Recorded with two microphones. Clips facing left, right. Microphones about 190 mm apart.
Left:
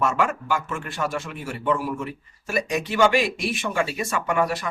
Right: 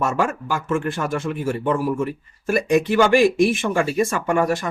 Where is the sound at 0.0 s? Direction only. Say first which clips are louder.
Right 1 dB; 40° right (ahead or behind).